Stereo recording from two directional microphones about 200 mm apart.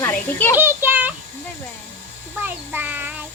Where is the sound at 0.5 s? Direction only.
10° right (ahead or behind).